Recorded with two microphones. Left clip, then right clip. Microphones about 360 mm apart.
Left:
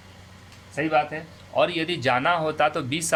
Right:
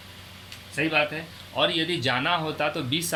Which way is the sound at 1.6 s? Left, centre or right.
Left.